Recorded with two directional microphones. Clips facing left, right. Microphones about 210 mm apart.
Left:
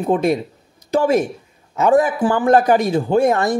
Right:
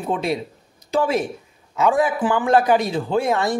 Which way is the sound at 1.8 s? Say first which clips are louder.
Left 4 dB; 45° left (ahead or behind).